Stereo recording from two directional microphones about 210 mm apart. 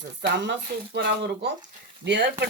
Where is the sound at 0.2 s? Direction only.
55° right (ahead or behind).